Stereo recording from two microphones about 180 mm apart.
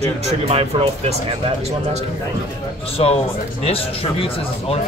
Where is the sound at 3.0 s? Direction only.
35° left (ahead or behind).